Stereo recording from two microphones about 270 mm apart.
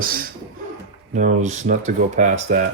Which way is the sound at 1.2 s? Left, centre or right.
Right.